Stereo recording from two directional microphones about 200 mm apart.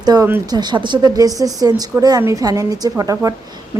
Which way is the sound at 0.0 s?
20° right (ahead or behind).